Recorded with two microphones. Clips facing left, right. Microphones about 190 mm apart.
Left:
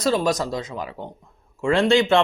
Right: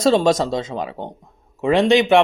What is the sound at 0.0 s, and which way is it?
Speech, 25° right (ahead or behind).